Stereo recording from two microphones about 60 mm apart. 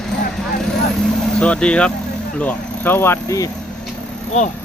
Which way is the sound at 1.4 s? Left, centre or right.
Centre.